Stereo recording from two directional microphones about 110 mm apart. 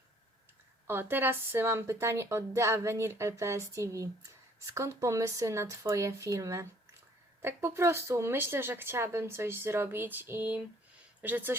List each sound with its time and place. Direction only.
0.9 s a woman's voice: 20° right (ahead or behind)